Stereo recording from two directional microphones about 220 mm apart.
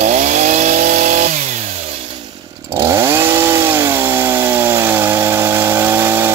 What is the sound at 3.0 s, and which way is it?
Chainsaw, 10° right (ahead or behind).